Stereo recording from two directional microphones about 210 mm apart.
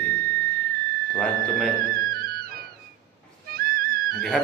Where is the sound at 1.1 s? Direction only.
5° left (ahead or behind).